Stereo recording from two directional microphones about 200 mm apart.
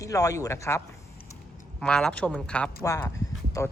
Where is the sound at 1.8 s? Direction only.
5° left (ahead or behind).